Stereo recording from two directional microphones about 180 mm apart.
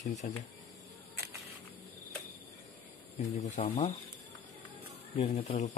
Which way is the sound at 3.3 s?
40° left (ahead or behind).